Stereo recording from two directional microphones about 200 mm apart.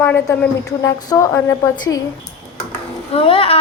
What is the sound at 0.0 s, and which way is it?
A woman's voice, 10° left (ahead or behind).